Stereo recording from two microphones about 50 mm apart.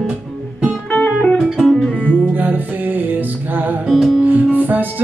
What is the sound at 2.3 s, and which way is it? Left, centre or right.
Music, right.